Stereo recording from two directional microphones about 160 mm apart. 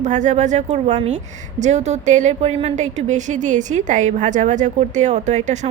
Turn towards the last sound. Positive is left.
turn(degrees=-45)  # may be behind; listen again after turning